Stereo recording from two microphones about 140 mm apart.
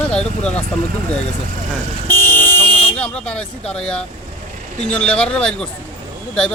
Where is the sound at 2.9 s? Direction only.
5° left (ahead or behind).